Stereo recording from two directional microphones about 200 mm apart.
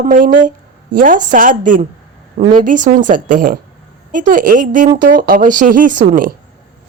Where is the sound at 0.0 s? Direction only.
40° right (ahead or behind).